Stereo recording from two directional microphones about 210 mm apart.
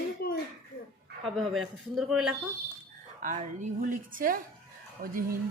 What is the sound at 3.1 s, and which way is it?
A woman's voice, 40° right (ahead or behind).